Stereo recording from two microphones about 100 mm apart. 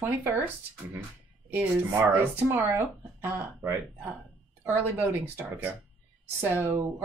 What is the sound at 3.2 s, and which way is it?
Speech, 25° right (ahead or behind).